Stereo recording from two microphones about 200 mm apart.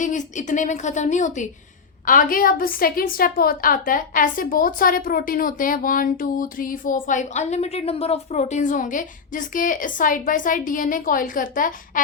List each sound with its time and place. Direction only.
0.0 s a woman's voice: 40° left (ahead or behind)